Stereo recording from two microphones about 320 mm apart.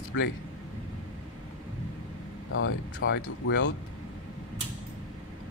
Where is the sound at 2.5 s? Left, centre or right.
Left.